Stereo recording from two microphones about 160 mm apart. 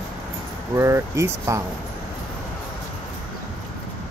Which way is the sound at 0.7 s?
15° right (ahead or behind).